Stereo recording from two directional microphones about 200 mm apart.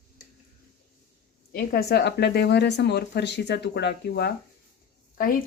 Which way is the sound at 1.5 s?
50° left (ahead or behind).